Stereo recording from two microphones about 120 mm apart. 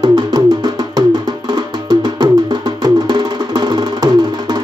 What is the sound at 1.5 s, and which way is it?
Music, 35° right (ahead or behind).